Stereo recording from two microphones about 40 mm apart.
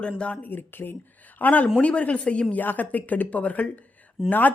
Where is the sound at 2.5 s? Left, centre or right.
Left.